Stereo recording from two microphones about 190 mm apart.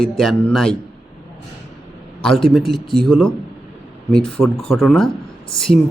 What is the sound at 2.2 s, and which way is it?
Speech, centre (ahead or behind).